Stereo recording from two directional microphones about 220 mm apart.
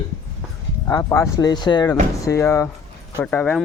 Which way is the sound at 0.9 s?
15° left (ahead or behind).